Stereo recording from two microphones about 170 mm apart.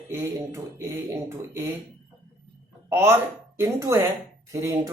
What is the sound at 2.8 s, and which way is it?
Speech, 15° right (ahead or behind).